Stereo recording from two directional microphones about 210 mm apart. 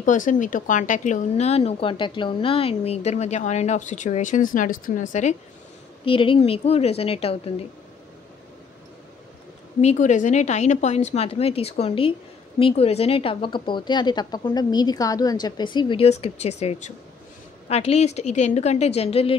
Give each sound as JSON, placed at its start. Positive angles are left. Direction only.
{"t": 0.0, "sound": "speech", "side_deg": 35}
{"t": 6.0, "sound": "a woman's voice", "side_deg": 25}
{"t": 9.8, "sound": "a woman's voice", "side_deg": 35}